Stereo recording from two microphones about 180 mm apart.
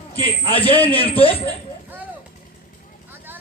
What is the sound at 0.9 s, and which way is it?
Speech, 30° left (ahead or behind).